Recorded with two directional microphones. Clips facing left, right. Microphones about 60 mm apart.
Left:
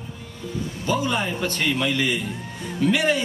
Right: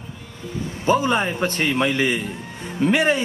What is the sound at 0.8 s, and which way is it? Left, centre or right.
A man's voice, right.